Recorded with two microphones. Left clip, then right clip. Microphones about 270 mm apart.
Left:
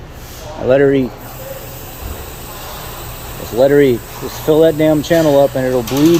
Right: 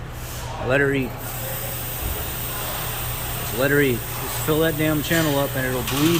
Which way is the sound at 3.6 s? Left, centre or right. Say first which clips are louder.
Left 10 dB; centre.